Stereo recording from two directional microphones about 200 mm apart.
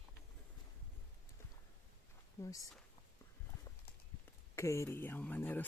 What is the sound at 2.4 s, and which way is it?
Speech, 15° left (ahead or behind).